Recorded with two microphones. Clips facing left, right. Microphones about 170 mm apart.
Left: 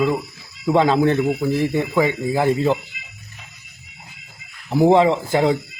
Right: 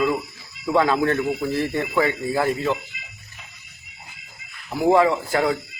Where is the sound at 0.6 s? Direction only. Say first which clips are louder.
Left 4 dB; 20° left (ahead or behind).